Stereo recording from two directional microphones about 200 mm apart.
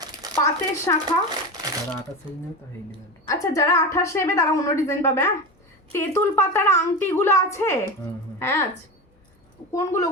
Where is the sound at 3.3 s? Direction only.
15° left (ahead or behind).